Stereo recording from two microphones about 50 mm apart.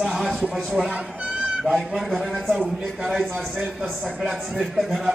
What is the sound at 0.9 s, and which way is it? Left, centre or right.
Speech, right.